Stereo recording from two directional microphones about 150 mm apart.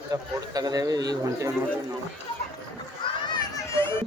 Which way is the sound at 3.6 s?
20° left (ahead or behind).